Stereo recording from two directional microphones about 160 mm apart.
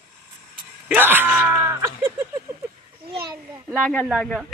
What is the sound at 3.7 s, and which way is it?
Speech, 5° left (ahead or behind).